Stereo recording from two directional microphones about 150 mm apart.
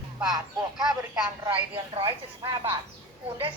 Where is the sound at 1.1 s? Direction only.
35° right (ahead or behind).